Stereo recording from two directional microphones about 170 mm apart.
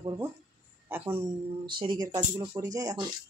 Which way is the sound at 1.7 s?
25° right (ahead or behind).